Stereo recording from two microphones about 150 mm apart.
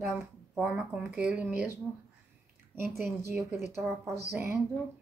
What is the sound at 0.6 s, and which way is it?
Speech, 10° right (ahead or behind).